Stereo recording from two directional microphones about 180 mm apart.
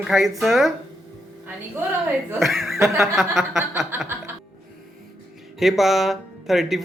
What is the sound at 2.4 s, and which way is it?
Speech, centre (ahead or behind).